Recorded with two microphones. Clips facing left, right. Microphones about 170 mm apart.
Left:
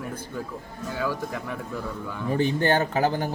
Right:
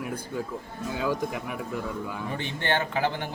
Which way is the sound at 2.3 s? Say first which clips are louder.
Left 7 dB; 40° left (ahead or behind).